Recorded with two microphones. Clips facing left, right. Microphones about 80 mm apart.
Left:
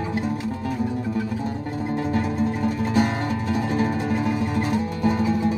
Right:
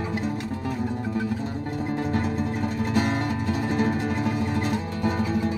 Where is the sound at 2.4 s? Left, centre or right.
Centre.